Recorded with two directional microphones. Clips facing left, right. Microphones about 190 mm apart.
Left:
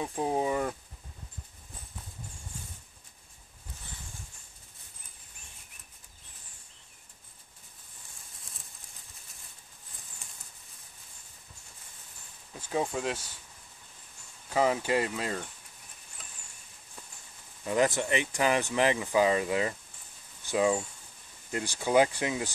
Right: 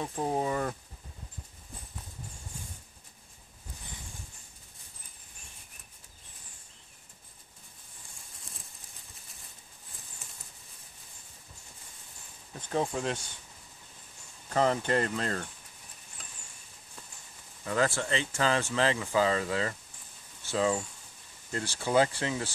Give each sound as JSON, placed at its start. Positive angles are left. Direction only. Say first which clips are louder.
{"t": 0.0, "sound": "speech", "louder": "left 1 dB", "side_deg": 10}
{"t": 10.2, "sound": "a sound", "louder": "right 2 dB", "side_deg": 0}
{"t": 12.5, "sound": "speech", "louder": "even", "side_deg": 5}
{"t": 14.5, "sound": "speech", "louder": "even", "side_deg": 5}
{"t": 16.2, "sound": "a sound", "louder": "even", "side_deg": 0}
{"t": 17.6, "sound": "speech", "louder": "left 2 dB", "side_deg": 20}